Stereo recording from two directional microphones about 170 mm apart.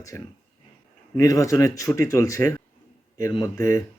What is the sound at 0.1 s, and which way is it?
Speech, 15° left (ahead or behind).